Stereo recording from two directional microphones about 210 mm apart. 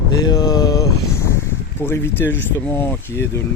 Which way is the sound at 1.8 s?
10° left (ahead or behind).